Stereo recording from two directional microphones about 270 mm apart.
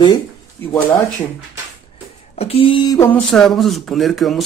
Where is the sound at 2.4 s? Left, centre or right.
Left.